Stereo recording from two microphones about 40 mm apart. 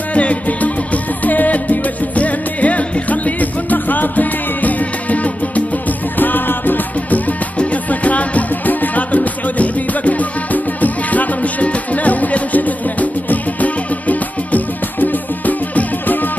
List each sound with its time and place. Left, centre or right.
0.1 s music: left
6.1 s music: left
7.5 s music: left